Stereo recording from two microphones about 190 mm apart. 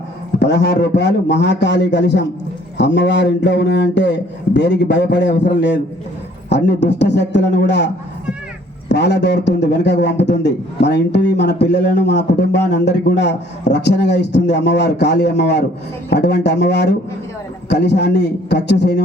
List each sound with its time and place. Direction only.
0.3 s a man's voice: 65° left (ahead or behind)
8.9 s a man's voice: 65° left (ahead or behind)